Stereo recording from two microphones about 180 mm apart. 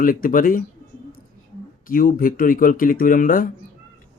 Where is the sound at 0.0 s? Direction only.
50° left (ahead or behind).